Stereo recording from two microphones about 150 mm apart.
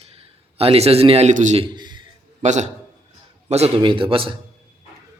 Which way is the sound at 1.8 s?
30° right (ahead or behind).